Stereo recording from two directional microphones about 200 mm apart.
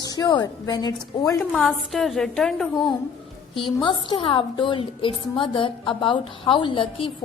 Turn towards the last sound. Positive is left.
turn(degrees=25)  # may be behind; listen again after turning